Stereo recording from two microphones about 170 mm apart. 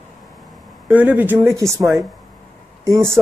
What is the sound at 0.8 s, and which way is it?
Speech, 10° right (ahead or behind).